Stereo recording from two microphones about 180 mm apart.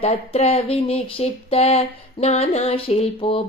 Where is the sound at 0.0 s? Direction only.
35° left (ahead or behind).